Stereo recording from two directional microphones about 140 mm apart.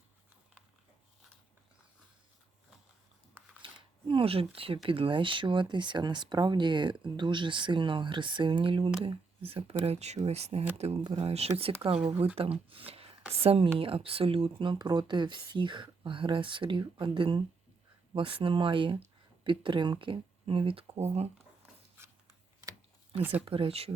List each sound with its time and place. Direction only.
3.6 s a sound: 40° right (ahead or behind)
4.9 s speech: 40° right (ahead or behind)
23.5 s speech: 40° right (ahead or behind)